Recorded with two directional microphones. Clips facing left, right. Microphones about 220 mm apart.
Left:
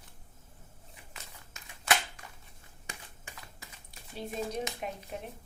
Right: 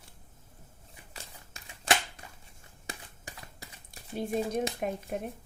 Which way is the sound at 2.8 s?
35° right (ahead or behind).